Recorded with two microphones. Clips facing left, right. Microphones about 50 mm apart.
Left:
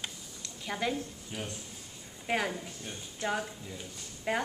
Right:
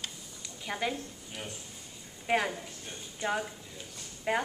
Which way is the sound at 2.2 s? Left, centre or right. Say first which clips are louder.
Right 2 dB; centre.